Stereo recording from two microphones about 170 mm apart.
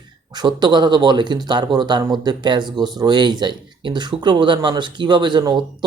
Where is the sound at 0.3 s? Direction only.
25° right (ahead or behind).